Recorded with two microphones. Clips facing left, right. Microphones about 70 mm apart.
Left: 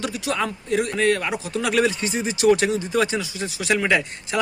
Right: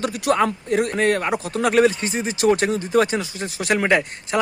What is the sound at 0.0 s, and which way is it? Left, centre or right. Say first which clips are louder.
A man's voice: right 5 dB; right.